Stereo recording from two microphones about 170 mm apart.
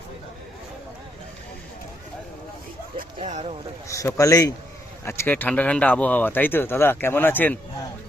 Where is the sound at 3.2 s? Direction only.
40° right (ahead or behind).